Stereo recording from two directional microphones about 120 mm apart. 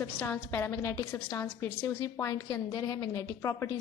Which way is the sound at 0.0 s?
20° left (ahead or behind).